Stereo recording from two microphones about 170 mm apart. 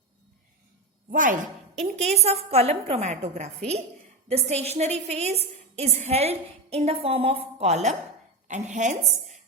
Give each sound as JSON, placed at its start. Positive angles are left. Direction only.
{"t": 1.1, "sound": "speech", "side_deg": -50}
{"t": 1.8, "sound": "a woman's voice", "side_deg": -40}